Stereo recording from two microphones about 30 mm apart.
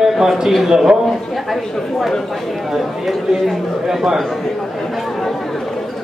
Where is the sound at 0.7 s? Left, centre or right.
Centre.